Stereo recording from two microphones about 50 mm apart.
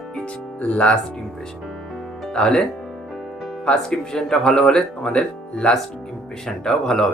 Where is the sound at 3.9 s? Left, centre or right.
Centre.